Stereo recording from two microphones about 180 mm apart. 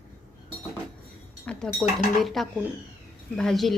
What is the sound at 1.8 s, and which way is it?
A woman's voice, centre (ahead or behind).